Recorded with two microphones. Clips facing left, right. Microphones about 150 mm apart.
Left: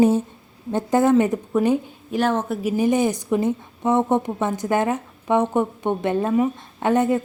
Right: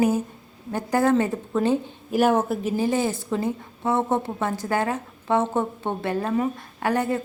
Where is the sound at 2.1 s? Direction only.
10° right (ahead or behind).